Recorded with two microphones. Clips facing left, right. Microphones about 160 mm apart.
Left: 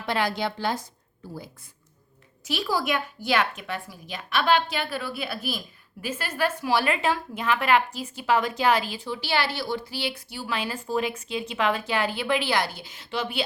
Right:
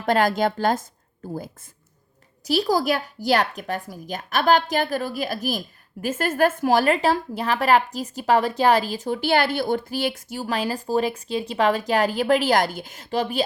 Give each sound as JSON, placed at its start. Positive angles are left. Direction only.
{"t": 0.0, "sound": "a woman's voice", "side_deg": -45}
{"t": 2.5, "sound": "speech", "side_deg": -35}